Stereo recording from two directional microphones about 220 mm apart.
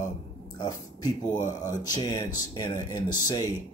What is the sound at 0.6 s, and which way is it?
Speech, 20° left (ahead or behind).